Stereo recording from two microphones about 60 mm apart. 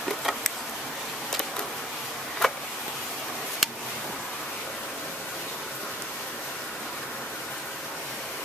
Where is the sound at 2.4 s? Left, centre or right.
Centre.